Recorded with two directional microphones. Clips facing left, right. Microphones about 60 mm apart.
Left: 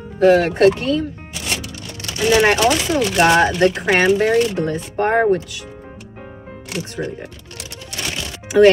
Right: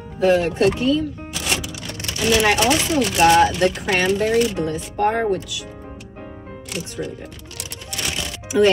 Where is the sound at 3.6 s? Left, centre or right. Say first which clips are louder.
Left 4 dB; left.